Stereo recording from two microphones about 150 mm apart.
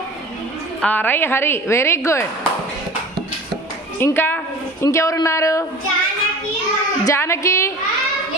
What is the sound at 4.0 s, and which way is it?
A woman's voice, 15° left (ahead or behind).